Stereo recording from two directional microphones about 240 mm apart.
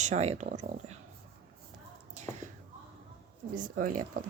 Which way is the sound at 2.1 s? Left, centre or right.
Right.